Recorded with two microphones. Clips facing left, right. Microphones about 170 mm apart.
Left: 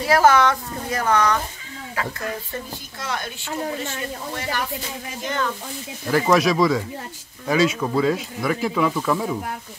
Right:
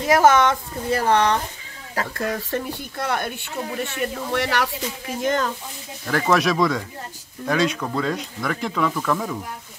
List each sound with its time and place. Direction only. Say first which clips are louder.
0.0 s speech: right 1 dB; 20° right (ahead or behind)
2.1 s speech: right 4 dB; 60° right (ahead or behind)
3.8 s speech: right 3 dB; 70° right (ahead or behind)
5.2 s speech: right 4 dB; 45° right (ahead or behind)
6.0 s speech: left 2 dB; 5° left (ahead or behind)